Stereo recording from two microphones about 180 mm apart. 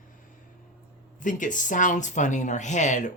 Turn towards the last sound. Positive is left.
turn(degrees=45)  # may be behind; listen again after turning